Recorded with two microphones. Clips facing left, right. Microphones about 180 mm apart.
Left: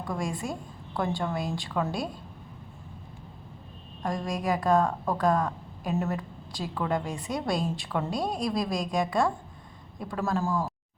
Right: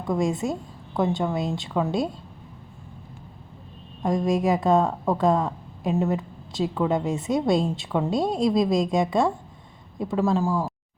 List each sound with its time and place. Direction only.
0.0 s a woman's voice: 20° right (ahead or behind)
4.0 s a woman's voice: 20° right (ahead or behind)